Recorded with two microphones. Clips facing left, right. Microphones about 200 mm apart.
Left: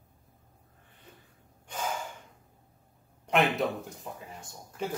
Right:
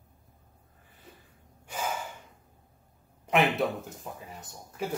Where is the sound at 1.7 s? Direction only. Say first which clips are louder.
Right 1 dB; 5° right (ahead or behind).